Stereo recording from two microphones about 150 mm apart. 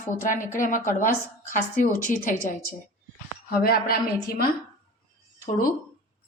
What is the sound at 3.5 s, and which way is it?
Speech, 90° left.